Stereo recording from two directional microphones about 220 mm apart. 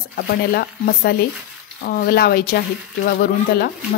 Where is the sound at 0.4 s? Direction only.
45° left (ahead or behind).